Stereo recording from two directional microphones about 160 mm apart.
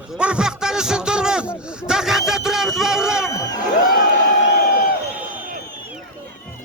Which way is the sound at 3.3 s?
20° left (ahead or behind).